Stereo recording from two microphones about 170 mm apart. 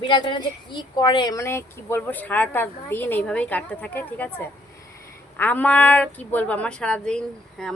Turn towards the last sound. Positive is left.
turn(degrees=5)  # may be behind; listen again after turning